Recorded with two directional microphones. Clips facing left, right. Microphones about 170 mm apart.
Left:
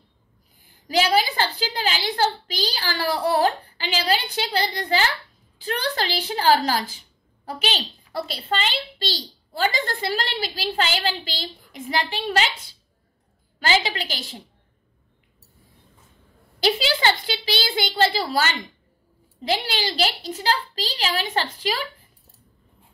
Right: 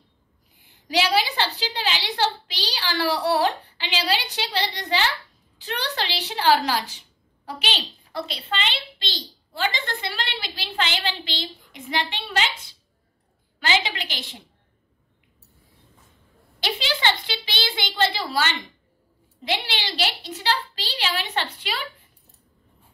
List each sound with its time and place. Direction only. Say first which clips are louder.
0.8 s a woman's voice: left 2 dB; 45° left (ahead or behind)
16.5 s a sound: left 6 dB; 40° left (ahead or behind)
19.4 s a woman's voice: left 4 dB; 40° left (ahead or behind)